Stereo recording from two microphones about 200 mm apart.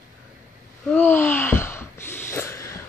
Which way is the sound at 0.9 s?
10° left (ahead or behind).